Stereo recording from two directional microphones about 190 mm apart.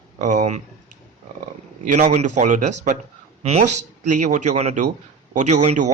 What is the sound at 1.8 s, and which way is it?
Speech, 40° right (ahead or behind).